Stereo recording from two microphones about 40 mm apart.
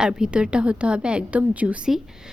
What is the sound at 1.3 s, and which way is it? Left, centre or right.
Speech, right.